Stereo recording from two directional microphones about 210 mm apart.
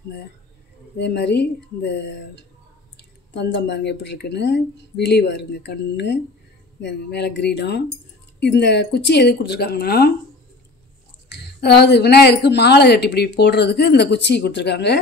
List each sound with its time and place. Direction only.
0.9 s a woman's voice: 55° left (ahead or behind)
11.2 s a woman's voice: 50° left (ahead or behind)